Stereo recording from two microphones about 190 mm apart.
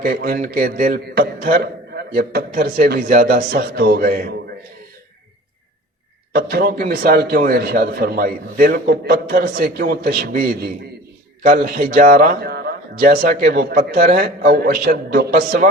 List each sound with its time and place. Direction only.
0.0 s a man's voice: 50° right (ahead or behind)
6.3 s a man's voice: 55° right (ahead or behind)